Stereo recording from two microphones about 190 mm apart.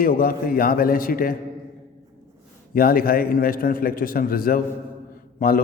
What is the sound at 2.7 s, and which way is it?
A man's voice, 50° left (ahead or behind).